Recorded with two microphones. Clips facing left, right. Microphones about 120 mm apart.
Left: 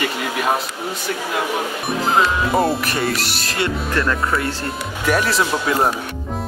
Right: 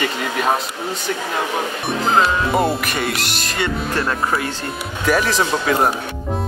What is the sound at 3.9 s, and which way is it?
Speech, 30° right (ahead or behind).